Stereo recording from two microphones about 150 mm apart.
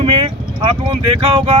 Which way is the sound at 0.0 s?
35° right (ahead or behind).